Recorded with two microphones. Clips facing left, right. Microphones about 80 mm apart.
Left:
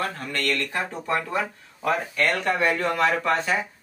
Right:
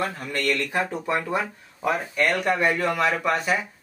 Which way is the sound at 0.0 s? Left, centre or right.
Centre.